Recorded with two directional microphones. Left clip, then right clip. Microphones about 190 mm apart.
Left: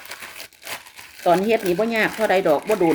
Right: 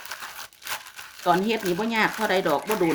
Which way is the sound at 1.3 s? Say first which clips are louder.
Left 5 dB; 10° right (ahead or behind).